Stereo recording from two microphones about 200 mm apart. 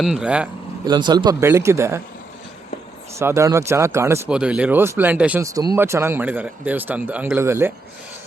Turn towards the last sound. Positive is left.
turn(degrees=-10)  # may be behind; listen again after turning